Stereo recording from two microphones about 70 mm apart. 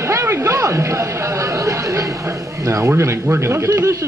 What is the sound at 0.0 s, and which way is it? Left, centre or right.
Speech, right.